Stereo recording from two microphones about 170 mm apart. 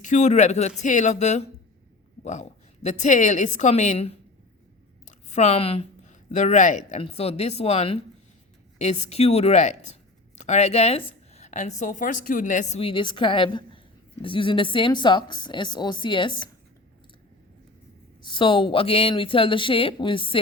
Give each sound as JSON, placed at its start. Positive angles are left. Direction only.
{"t": 0.0, "sound": "a woman's voice", "side_deg": 45}
{"t": 12.8, "sound": "a woman's voice", "side_deg": 30}
{"t": 18.2, "sound": "a woman's voice", "side_deg": 25}